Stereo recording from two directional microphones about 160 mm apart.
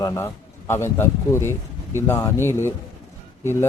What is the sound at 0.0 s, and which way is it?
Speech, 15° left (ahead or behind).